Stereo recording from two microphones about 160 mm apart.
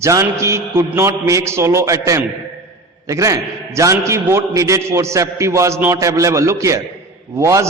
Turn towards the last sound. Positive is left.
turn(degrees=-20)  # may be behind; listen again after turning